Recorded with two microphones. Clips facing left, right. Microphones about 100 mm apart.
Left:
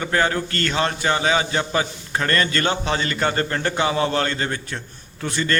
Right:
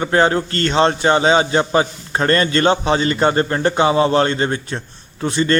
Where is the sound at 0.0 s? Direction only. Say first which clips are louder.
Right 6 dB; 30° right (ahead or behind).